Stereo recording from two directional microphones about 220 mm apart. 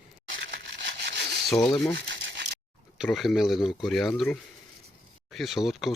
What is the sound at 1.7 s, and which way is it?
Speech, 20° left (ahead or behind).